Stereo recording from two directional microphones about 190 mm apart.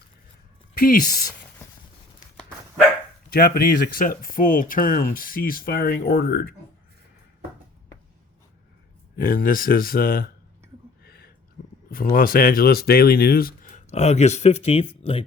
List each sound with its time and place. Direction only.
0.7 s speech: 45° left (ahead or behind)
3.3 s speech: 50° left (ahead or behind)
9.1 s speech: 50° left (ahead or behind)
11.0 s a sound: 55° left (ahead or behind)
11.9 s speech: 50° left (ahead or behind); by 15.2 s 30° left (ahead or behind)